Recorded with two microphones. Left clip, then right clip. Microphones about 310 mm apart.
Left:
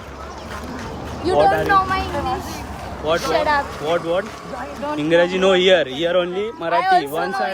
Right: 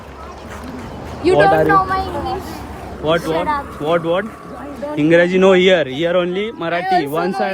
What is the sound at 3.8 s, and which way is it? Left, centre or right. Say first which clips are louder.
A man's voice: right 7 dB; right.